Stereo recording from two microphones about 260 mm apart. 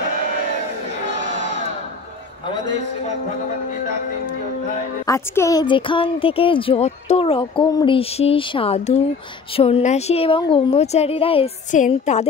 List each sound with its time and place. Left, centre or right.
5.0 s a woman's voice: centre; by 12.3 s left